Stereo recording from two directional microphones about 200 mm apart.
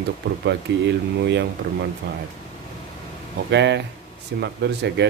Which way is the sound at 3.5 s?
60° right (ahead or behind).